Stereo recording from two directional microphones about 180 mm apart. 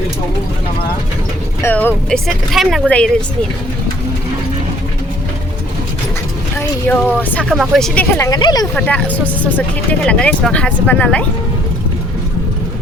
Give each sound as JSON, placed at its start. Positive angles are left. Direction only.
{"t": 1.6, "sound": "speech", "side_deg": 10}
{"t": 6.6, "sound": "speech", "side_deg": 10}
{"t": 7.5, "sound": "speech", "side_deg": 0}
{"t": 8.2, "sound": "speech", "side_deg": 25}
{"t": 8.7, "sound": "speech", "side_deg": 5}